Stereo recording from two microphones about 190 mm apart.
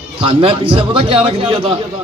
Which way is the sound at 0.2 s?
30° right (ahead or behind).